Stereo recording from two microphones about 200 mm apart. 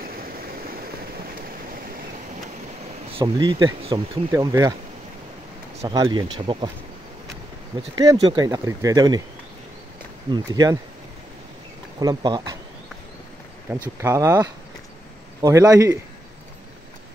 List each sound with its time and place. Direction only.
3.1 s speech: 25° right (ahead or behind)
5.8 s speech: 15° right (ahead or behind)
7.7 s speech: 20° right (ahead or behind)
10.3 s speech: 20° right (ahead or behind)
12.0 s speech: 20° right (ahead or behind)
13.9 s speech: 15° right (ahead or behind)